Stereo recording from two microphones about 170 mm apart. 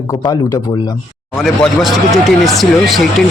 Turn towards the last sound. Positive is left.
turn(degrees=0)  # may be behind; listen again after turning